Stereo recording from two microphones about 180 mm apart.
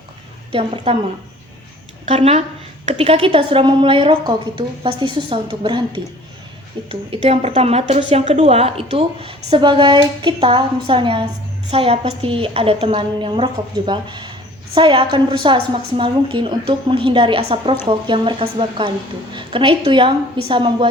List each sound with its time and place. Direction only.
0.5 s a woman's voice: 30° right (ahead or behind)
2.0 s a woman's voice: 35° right (ahead or behind)